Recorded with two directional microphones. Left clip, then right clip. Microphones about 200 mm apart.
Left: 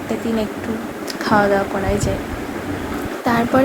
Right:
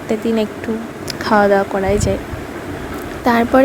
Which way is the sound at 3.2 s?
35° right (ahead or behind).